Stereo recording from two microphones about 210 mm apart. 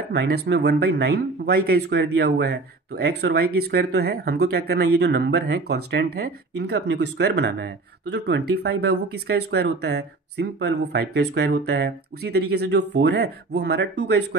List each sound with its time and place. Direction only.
0.1 s speech: 50° right (ahead or behind)